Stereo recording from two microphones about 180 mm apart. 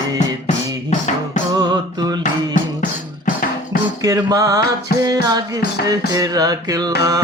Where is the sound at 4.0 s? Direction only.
20° right (ahead or behind).